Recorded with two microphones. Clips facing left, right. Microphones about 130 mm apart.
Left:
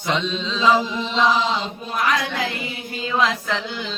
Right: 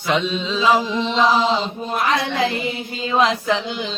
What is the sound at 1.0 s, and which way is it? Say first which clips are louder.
Chant: right 3 dB; 5° left (ahead or behind).